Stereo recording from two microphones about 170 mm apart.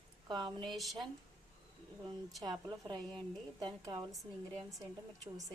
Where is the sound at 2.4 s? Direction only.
25° right (ahead or behind).